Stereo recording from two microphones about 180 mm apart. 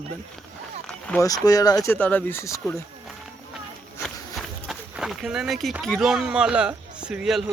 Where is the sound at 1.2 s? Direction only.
20° left (ahead or behind).